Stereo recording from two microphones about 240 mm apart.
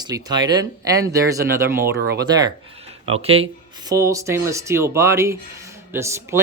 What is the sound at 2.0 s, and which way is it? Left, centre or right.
Speech, right.